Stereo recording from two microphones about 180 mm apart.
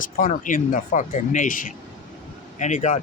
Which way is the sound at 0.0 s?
50° left (ahead or behind).